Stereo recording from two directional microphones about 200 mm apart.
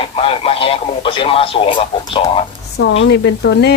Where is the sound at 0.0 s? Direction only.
30° left (ahead or behind).